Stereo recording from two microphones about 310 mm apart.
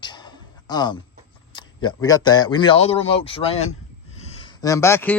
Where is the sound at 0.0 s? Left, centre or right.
Centre.